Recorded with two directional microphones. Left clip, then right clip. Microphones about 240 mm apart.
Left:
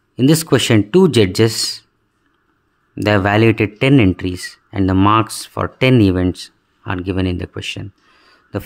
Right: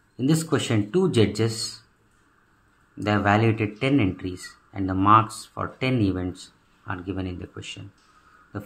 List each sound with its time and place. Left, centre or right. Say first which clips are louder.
0.1 s speech: left 10 dB; left
3.0 s speech: left 8 dB; left